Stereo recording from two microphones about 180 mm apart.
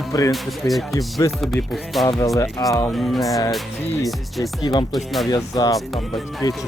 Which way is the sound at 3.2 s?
20° left (ahead or behind).